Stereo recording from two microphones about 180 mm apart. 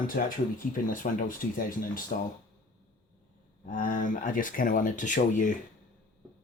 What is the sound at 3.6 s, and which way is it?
Speech, 45° left (ahead or behind).